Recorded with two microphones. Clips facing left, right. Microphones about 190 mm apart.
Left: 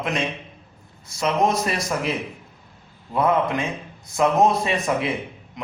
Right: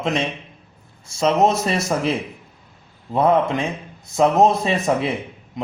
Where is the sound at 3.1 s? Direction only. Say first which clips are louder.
Right 3 dB; 25° right (ahead or behind).